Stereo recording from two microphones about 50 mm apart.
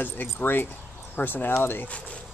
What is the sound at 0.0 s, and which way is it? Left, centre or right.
Speech, left.